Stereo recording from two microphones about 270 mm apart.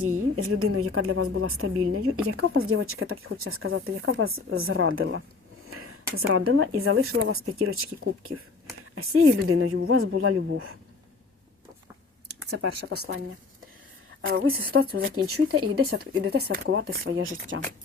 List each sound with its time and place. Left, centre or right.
0.0 s a woman's voice: right
9.0 s a woman's voice: right
12.4 s speech: right
14.2 s a woman's voice: right
16.5 s a woman's voice: right